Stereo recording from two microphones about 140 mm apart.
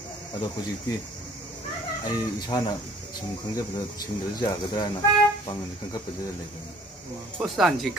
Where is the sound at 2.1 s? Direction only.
30° left (ahead or behind).